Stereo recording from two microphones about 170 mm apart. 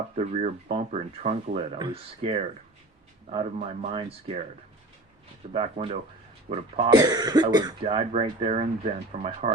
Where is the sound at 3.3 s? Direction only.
40° right (ahead or behind).